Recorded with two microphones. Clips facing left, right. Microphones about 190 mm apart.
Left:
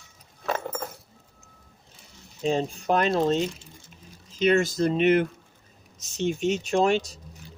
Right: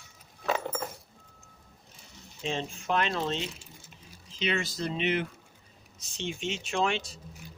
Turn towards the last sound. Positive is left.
turn(degrees=40)  # may be behind; listen again after turning